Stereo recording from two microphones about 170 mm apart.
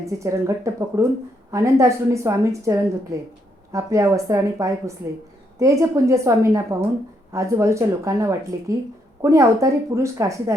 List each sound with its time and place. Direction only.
0.0 s a woman's voice: 15° right (ahead or behind)